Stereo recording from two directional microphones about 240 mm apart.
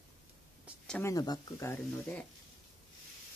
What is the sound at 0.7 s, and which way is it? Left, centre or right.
Speech, centre.